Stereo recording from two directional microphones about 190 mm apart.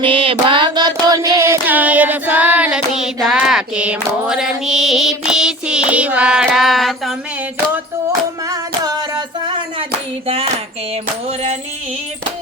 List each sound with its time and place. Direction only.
0.0 s music: 30° right (ahead or behind)
1.6 s hands: 10° right (ahead or behind)
8.4 s a sound: 20° right (ahead or behind)
10.2 s dishes: 30° right (ahead or behind)